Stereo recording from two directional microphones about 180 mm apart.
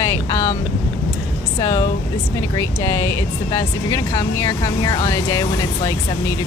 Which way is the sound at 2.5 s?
15° left (ahead or behind).